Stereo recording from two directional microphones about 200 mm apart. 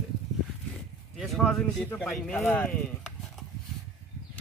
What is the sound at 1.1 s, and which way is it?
Speech, centre (ahead or behind).